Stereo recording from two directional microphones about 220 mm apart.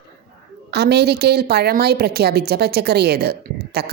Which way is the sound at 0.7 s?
50° right (ahead or behind).